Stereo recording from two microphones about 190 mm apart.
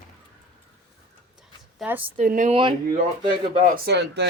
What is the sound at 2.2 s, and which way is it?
Speech, 45° right (ahead or behind).